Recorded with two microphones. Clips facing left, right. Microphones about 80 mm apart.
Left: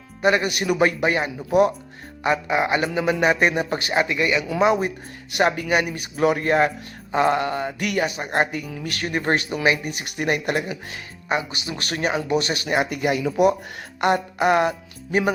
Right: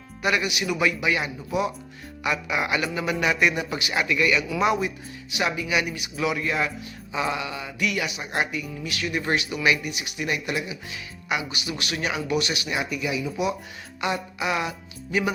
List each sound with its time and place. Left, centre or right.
0.2 s a man's voice: left
5.3 s speech: left